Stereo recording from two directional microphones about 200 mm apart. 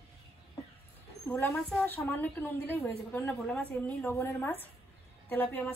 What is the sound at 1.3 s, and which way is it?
A woman's voice, 5° left (ahead or behind).